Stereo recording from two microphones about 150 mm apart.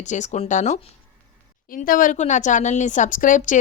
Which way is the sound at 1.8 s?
65° left (ahead or behind).